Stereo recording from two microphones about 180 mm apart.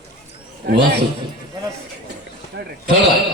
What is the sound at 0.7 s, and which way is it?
Speech, 65° right (ahead or behind).